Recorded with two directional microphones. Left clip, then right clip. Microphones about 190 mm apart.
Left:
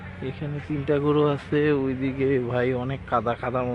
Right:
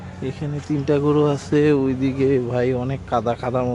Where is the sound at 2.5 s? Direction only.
10° right (ahead or behind).